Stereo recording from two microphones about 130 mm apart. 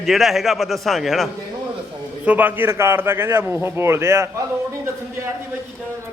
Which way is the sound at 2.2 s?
10° right (ahead or behind).